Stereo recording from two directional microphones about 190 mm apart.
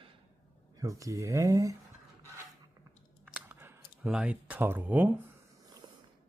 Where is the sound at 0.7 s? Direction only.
15° right (ahead or behind).